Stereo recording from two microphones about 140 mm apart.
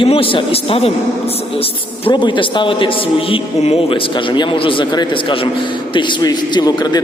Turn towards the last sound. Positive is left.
turn(degrees=30)  # may be behind; listen again after turning